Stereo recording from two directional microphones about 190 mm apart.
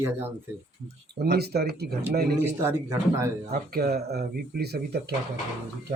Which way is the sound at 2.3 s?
15° right (ahead or behind).